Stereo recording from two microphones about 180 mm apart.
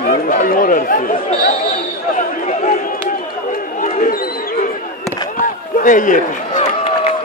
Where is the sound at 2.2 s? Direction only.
45° left (ahead or behind).